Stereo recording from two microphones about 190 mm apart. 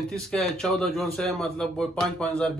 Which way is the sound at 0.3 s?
5° left (ahead or behind).